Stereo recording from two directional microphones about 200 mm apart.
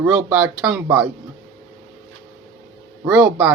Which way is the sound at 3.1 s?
10° right (ahead or behind).